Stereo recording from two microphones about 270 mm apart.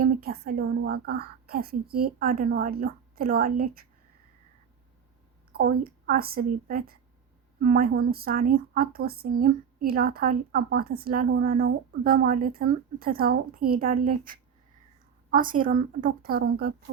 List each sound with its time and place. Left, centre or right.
0.0 s speech: right
5.5 s speech: right